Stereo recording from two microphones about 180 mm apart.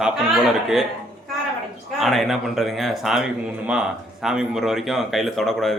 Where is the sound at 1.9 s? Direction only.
Centre (ahead or behind).